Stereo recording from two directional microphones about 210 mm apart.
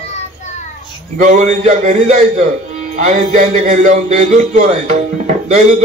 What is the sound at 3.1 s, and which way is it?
A man's voice, 35° right (ahead or behind).